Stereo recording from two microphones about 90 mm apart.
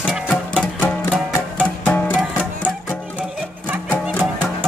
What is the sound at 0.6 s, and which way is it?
Music, 15° left (ahead or behind).